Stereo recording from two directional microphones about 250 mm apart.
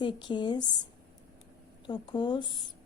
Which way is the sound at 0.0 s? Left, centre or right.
Centre.